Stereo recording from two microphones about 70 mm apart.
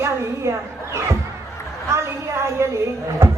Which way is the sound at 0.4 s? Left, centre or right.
Right.